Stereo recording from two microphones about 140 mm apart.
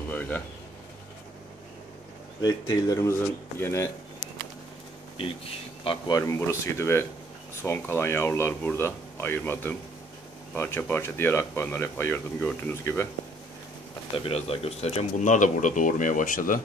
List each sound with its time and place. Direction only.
0.1 s a sound: 10° left (ahead or behind)
2.4 s speech: 30° left (ahead or behind)
5.9 s speech: 30° left (ahead or behind)
14.1 s speech: 40° left (ahead or behind); by 16.6 s 75° left (ahead or behind)